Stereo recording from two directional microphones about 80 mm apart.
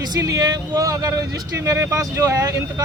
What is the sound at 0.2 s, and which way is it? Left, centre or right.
Speech, right.